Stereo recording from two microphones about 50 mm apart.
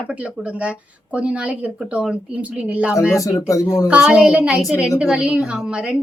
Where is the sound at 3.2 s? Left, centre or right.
Left.